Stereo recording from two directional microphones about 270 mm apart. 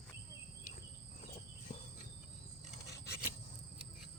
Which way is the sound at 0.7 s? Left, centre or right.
Left.